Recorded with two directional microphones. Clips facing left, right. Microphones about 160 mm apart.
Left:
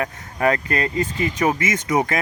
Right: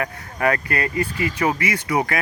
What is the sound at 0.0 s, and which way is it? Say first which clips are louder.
Speech: left 1 dB; 20° left (ahead or behind).